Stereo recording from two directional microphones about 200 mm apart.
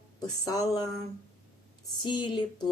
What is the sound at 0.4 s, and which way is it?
Speech, 20° left (ahead or behind).